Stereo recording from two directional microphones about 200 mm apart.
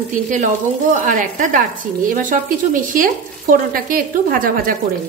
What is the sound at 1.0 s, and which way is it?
A woman's voice, 40° right (ahead or behind).